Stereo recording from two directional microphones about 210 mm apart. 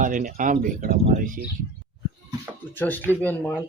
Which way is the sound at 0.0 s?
40° right (ahead or behind).